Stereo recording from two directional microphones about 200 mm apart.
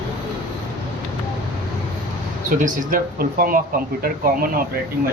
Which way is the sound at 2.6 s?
45° right (ahead or behind).